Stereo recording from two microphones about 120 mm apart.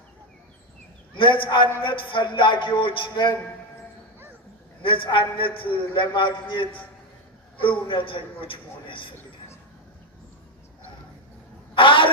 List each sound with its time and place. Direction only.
1.1 s a man's voice: 45° left (ahead or behind)
4.8 s a man's voice: 45° left (ahead or behind)
11.7 s a sound: 45° left (ahead or behind)